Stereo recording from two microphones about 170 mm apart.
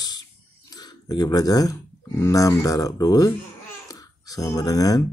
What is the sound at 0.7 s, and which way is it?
Speech, 25° left (ahead or behind).